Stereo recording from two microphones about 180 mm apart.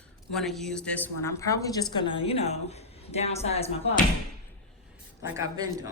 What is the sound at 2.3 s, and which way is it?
A woman's voice, 35° left (ahead or behind).